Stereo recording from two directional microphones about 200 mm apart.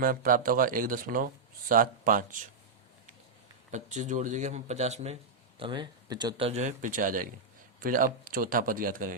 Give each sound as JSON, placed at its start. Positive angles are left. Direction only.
{"t": 0.0, "sound": "speech", "side_deg": -45}
{"t": 3.7, "sound": "speech", "side_deg": -35}